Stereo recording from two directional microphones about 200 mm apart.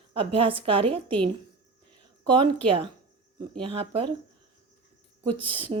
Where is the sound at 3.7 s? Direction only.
30° right (ahead or behind).